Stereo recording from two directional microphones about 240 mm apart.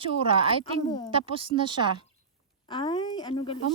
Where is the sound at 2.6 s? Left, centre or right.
Centre.